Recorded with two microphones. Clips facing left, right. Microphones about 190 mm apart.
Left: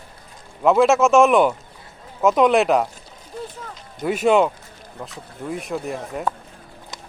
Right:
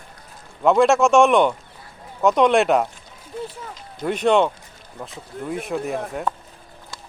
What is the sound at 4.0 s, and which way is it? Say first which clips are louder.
Speech: left 1 dB; 5° left (ahead or behind).